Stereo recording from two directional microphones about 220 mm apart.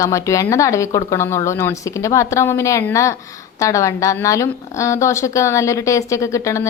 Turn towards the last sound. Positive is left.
turn(degrees=15)  # may be behind; listen again after turning